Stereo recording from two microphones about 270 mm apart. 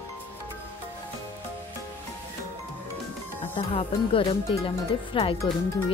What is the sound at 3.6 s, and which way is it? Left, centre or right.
Speech, centre.